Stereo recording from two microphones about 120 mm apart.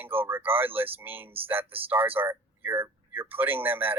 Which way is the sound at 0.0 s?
15° right (ahead or behind).